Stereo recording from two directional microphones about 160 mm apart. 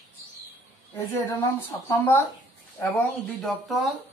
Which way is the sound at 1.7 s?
15° left (ahead or behind).